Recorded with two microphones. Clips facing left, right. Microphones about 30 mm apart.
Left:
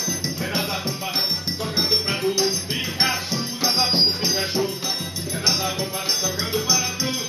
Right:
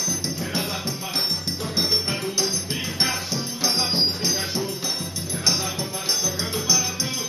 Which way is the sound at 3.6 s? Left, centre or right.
Centre.